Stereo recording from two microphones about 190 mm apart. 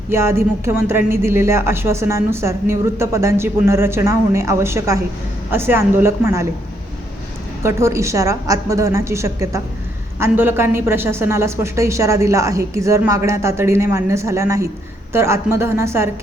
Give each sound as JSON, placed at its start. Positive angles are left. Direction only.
{"t": 0.1, "sound": "speech", "side_deg": -15}
{"t": 7.6, "sound": "speech", "side_deg": -15}